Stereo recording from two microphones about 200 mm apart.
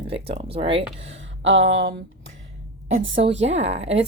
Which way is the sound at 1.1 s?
70° right (ahead or behind).